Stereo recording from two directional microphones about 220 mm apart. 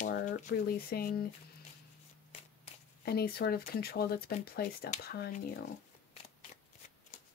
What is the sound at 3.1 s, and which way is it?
Speech, 45° left (ahead or behind).